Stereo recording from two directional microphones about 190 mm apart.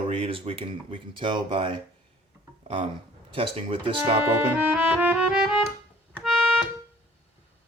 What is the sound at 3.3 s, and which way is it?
Speech, 30° right (ahead or behind).